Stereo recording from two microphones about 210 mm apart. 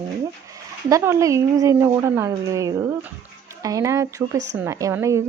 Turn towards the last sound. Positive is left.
turn(degrees=-15)  # may be behind; listen again after turning